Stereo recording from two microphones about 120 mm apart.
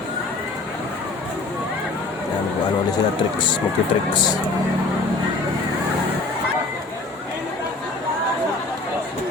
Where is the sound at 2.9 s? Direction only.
40° left (ahead or behind).